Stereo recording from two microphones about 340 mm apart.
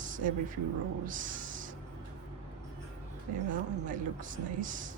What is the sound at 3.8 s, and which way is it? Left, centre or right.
Speech, right.